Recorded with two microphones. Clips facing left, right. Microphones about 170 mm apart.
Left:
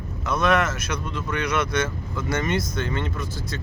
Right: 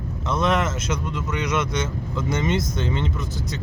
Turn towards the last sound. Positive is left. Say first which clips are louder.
# right 2 dB
turn(degrees=-20)  # may be behind; listen again after turning